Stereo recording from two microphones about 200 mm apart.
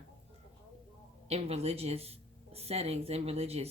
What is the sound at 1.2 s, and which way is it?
Speech, 30° right (ahead or behind).